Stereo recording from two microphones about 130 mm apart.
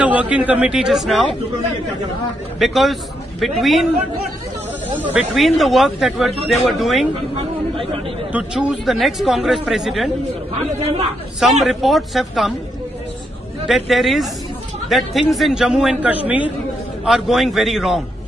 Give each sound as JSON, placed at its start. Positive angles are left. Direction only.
{"t": 0.0, "sound": "a man's voice", "side_deg": -10}
{"t": 2.6, "sound": "speech", "side_deg": 0}
{"t": 4.9, "sound": "a man's voice", "side_deg": -15}
{"t": 5.3, "sound": "speech", "side_deg": 0}
{"t": 7.7, "sound": "speech", "side_deg": -45}
{"t": 8.3, "sound": "speech", "side_deg": -10}
{"t": 11.6, "sound": "speech", "side_deg": 0}
{"t": 13.7, "sound": "a man's voice", "side_deg": 0}